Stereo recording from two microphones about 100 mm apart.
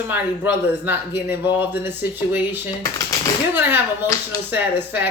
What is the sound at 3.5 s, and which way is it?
Speech, 20° right (ahead or behind).